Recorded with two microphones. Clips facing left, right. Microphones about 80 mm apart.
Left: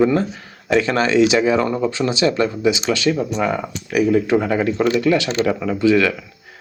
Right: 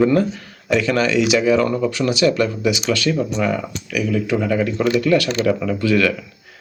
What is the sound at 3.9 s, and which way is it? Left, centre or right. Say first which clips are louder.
Speech: left 5 dB; left.